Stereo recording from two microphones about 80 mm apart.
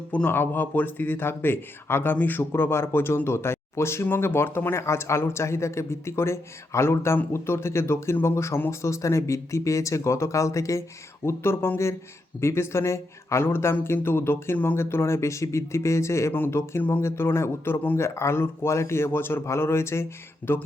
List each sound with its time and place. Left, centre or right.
0.1 s speech: left